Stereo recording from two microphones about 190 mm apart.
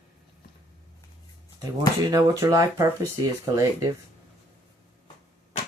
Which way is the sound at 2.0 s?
15° right (ahead or behind).